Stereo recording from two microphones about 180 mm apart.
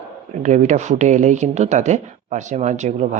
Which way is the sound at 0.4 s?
45° right (ahead or behind).